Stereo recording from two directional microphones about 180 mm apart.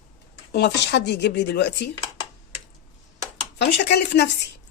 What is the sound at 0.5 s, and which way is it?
Speech, 70° left (ahead or behind).